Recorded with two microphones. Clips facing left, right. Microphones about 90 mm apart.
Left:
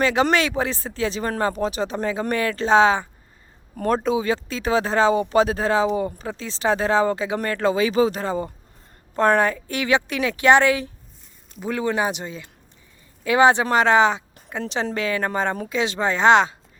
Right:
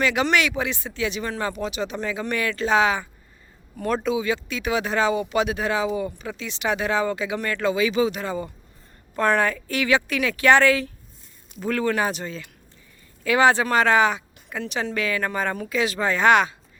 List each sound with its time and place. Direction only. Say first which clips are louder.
0.0 s speech: left 2 dB; 30° left (ahead or behind)